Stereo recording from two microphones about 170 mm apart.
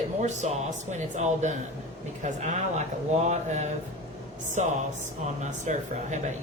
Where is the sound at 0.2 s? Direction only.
45° right (ahead or behind).